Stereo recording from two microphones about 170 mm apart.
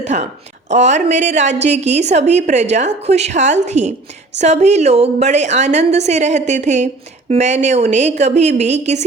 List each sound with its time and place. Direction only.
0.0 s a woman's voice: 45° right (ahead or behind)